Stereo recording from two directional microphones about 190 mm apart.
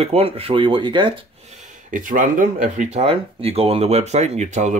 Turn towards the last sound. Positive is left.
turn(degrees=-35)  # may be behind; listen again after turning